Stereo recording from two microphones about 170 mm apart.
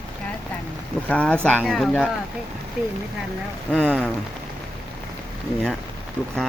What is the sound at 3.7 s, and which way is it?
Speech, 5° left (ahead or behind).